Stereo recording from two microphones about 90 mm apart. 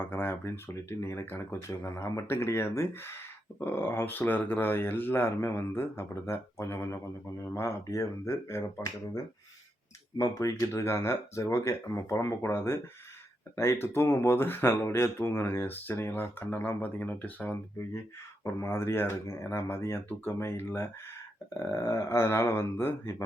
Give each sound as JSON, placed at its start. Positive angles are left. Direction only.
{"t": 0.0, "sound": "speech", "side_deg": 25}
{"t": 10.7, "sound": "speech", "side_deg": 30}
{"t": 18.6, "sound": "speech", "side_deg": 30}